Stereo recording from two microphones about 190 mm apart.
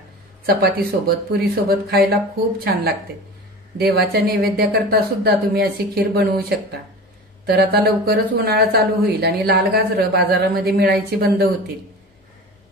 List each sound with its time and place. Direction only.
0.5 s speech: 50° right (ahead or behind)
7.4 s speech: 55° right (ahead or behind)